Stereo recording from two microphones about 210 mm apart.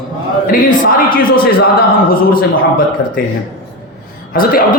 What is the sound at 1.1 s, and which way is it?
A man's voice, 45° left (ahead or behind).